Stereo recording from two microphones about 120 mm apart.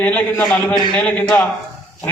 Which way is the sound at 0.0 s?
15° left (ahead or behind).